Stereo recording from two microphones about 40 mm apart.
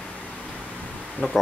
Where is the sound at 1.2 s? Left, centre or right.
Left.